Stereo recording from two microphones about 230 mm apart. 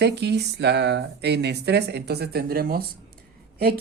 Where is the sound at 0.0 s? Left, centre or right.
Right.